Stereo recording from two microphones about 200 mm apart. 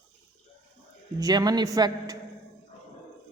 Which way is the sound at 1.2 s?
20° right (ahead or behind).